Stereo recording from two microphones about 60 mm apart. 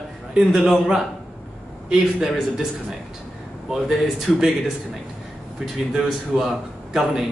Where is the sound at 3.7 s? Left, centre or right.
Centre.